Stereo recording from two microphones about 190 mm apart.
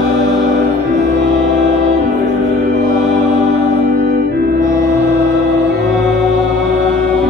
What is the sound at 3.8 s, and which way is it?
Music, 55° right (ahead or behind).